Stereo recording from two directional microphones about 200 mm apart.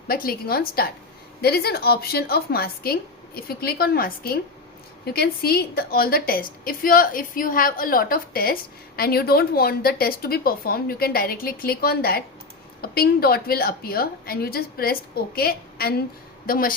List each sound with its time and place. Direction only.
0.1 s a woman's voice: 50° left (ahead or behind)